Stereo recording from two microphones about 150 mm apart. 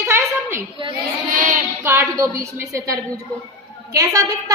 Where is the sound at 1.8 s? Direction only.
15° right (ahead or behind).